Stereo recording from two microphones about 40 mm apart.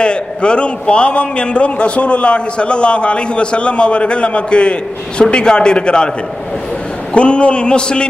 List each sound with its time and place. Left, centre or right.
0.0 s a man's voice: left
7.2 s a man's voice: left